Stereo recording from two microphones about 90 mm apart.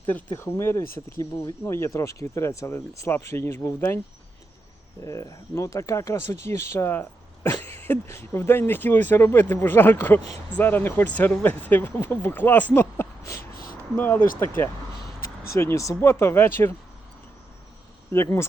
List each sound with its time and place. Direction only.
0.3 s speech: 25° left (ahead or behind)
5.0 s speech: 40° left (ahead or behind)
18.1 s speech: 30° left (ahead or behind)